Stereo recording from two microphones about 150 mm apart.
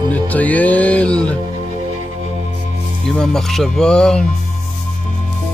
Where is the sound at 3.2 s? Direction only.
5° left (ahead or behind).